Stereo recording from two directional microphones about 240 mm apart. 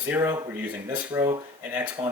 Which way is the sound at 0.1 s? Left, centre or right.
Centre.